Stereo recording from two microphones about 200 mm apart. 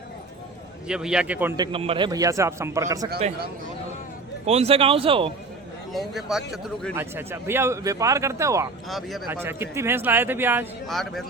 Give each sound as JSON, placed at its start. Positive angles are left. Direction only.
{"t": 0.9, "sound": "a man's voice", "side_deg": -5}
{"t": 1.5, "sound": "speech", "side_deg": -25}
{"t": 4.4, "sound": "speech", "side_deg": -30}
{"t": 5.9, "sound": "a man's voice", "side_deg": 0}
{"t": 8.9, "sound": "a man's voice", "side_deg": 0}
{"t": 9.3, "sound": "speech", "side_deg": -10}
{"t": 10.8, "sound": "a man's voice", "side_deg": 0}